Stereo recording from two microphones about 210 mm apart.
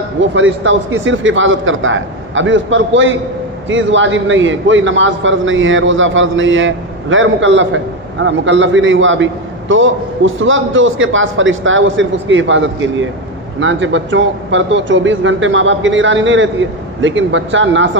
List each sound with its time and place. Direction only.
0.2 s a man's voice: 65° right (ahead or behind)